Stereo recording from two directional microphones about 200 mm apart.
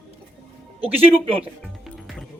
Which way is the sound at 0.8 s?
30° right (ahead or behind).